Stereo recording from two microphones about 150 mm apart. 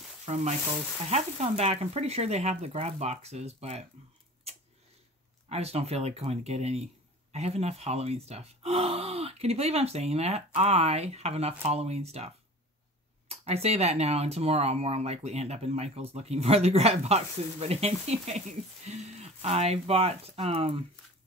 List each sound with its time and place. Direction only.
0.2 s speech: 45° right (ahead or behind)
5.5 s speech: 45° right (ahead or behind)
13.3 s speech: 45° right (ahead or behind)